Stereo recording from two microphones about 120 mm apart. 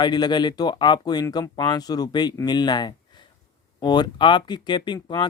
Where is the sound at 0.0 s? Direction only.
35° left (ahead or behind).